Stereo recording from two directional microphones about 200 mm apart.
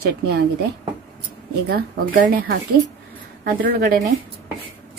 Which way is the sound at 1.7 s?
50° right (ahead or behind).